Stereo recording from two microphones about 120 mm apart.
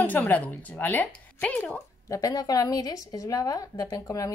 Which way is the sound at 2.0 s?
30° left (ahead or behind).